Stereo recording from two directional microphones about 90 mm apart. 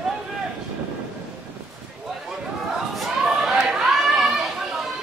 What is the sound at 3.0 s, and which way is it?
Chatter, centre (ahead or behind).